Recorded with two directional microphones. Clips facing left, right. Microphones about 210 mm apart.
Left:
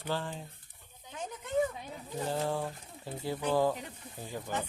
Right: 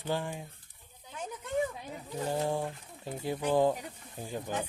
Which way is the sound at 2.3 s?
15° right (ahead or behind).